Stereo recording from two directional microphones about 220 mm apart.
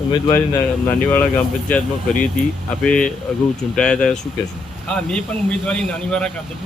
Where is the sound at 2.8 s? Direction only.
5° left (ahead or behind).